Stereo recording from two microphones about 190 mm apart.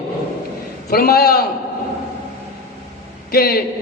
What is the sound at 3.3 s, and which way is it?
Speech, 55° left (ahead or behind).